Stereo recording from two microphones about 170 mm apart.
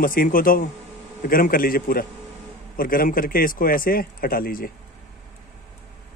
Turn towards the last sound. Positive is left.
turn(degrees=55)  # may be behind; listen again after turning